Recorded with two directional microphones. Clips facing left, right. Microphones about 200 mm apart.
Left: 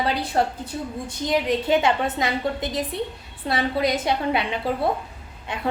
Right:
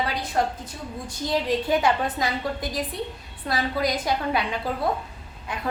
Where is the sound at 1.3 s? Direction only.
20° left (ahead or behind).